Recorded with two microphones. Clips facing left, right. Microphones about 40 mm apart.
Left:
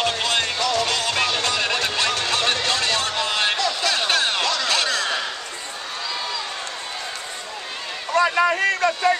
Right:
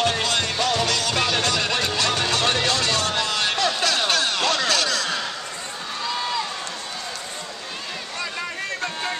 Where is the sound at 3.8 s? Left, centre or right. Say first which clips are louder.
Left 1 dB; centre.